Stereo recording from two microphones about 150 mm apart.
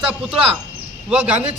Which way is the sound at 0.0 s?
5° right (ahead or behind).